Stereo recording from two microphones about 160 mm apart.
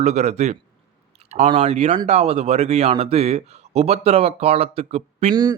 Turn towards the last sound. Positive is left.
turn(degrees=-40)  # may be behind; listen again after turning